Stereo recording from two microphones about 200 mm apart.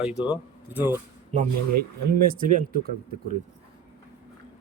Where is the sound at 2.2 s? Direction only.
45° right (ahead or behind).